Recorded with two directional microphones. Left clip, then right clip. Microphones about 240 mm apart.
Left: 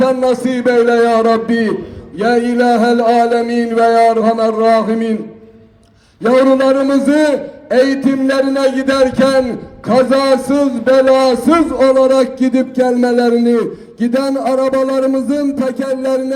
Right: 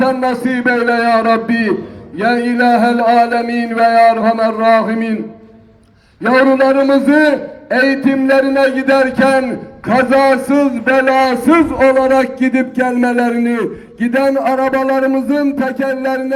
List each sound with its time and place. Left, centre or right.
0.0 s a man's voice: left
6.2 s a man's voice: left